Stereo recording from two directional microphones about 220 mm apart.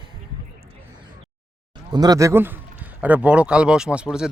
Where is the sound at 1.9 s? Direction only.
15° right (ahead or behind).